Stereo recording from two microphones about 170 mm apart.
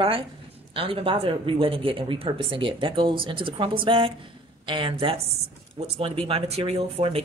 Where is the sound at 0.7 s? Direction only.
30° right (ahead or behind).